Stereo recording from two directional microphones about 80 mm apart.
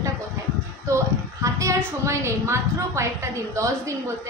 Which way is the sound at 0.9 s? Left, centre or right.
Right.